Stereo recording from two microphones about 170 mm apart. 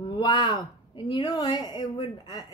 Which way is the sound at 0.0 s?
25° left (ahead or behind).